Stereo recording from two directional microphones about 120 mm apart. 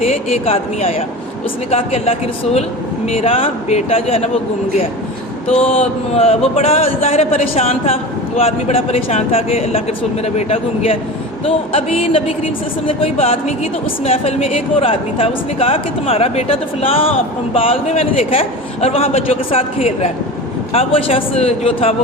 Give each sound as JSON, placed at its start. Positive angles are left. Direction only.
{"t": 0.0, "sound": "a man's voice", "side_deg": 60}
{"t": 5.5, "sound": "a man's voice", "side_deg": 50}